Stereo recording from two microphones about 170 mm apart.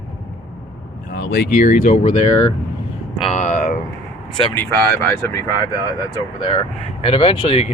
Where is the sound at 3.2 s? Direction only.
40° left (ahead or behind).